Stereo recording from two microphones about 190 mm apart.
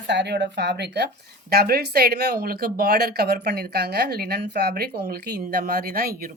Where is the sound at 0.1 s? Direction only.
65° right (ahead or behind).